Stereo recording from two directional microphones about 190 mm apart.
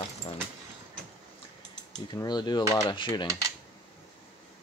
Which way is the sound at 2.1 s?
20° left (ahead or behind).